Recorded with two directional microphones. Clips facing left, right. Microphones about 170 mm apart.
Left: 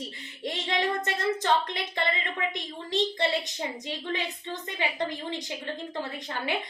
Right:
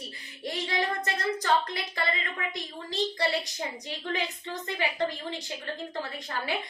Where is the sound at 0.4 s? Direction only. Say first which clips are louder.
Left 2 dB; 20° left (ahead or behind).